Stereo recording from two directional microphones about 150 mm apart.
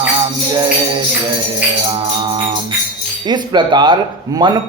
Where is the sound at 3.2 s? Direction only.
30° right (ahead or behind).